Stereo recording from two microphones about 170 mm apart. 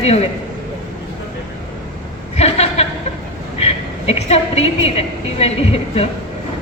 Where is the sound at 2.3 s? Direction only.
40° left (ahead or behind).